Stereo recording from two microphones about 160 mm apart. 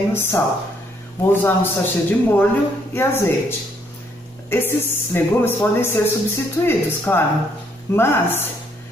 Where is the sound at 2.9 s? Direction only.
15° left (ahead or behind).